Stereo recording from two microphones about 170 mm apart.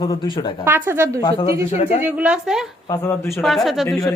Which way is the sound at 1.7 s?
45° left (ahead or behind).